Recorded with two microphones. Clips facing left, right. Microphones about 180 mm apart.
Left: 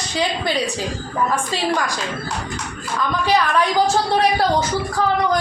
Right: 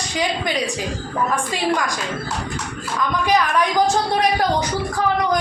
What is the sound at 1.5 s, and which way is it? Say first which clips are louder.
Speech: even; 15° right (ahead or behind).